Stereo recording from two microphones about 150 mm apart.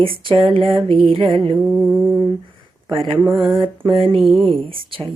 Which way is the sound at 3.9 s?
35° right (ahead or behind).